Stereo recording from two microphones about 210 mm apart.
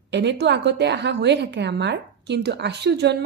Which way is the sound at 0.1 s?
55° right (ahead or behind).